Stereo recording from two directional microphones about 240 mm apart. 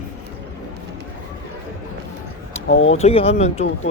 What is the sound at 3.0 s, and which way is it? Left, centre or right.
Speech, left.